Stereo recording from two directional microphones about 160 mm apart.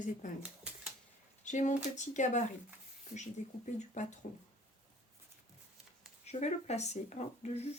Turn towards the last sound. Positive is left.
turn(degrees=45)  # may be behind; listen again after turning